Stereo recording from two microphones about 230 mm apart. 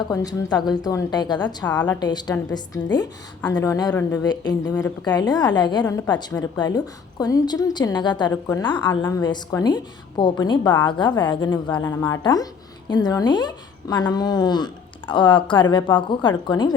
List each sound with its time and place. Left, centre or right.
0.0 s a woman's voice: centre
1.6 s a woman's voice: centre
2.0 s a woman's voice: centre